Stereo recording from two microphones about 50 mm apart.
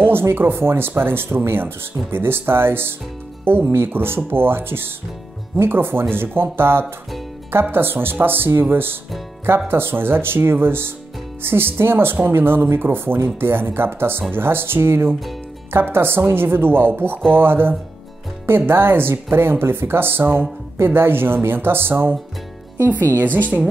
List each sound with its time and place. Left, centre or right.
0.0 s speech: right
23.1 s a woman's voice: right